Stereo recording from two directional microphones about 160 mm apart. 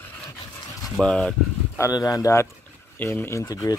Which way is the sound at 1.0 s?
5° left (ahead or behind).